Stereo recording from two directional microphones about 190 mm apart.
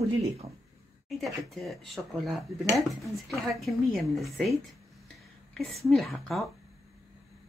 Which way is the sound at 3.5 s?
Centre (ahead or behind).